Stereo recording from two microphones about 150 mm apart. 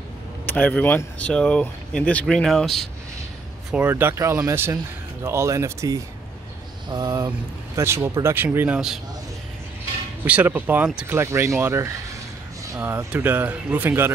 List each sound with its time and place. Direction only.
0.5 s speech: 10° left (ahead or behind)
3.7 s speech: 15° right (ahead or behind)
10.2 s speech: 10° right (ahead or behind)